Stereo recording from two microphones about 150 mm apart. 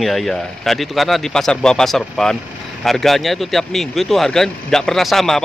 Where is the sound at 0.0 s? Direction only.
Centre (ahead or behind).